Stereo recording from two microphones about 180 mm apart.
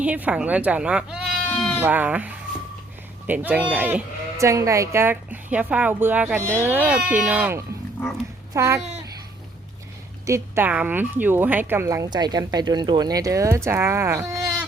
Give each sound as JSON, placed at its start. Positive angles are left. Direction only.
{"t": 0.0, "sound": "speech", "side_deg": -10}
{"t": 1.8, "sound": "speech", "side_deg": -10}
{"t": 10.2, "sound": "speech", "side_deg": -15}